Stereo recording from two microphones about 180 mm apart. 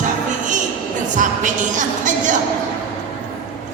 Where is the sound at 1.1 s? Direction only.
45° right (ahead or behind).